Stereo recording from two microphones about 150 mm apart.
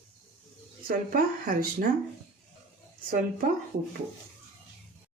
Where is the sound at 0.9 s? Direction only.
65° right (ahead or behind).